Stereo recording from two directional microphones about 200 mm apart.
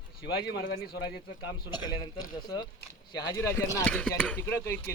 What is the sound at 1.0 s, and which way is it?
A man's voice, 20° left (ahead or behind).